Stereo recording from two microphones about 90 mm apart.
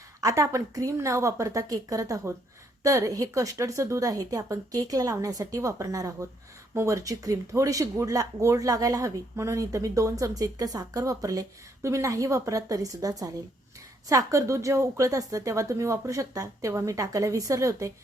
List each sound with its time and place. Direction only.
0.2 s a woman's voice: 40° right (ahead or behind)